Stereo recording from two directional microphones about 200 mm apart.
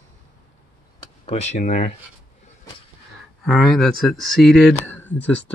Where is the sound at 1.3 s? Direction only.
35° left (ahead or behind).